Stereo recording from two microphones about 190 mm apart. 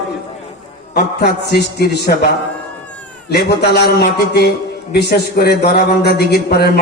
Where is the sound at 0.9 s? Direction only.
55° left (ahead or behind).